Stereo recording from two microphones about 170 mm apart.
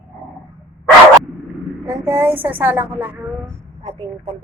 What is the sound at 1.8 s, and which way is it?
A woman's voice, 15° right (ahead or behind).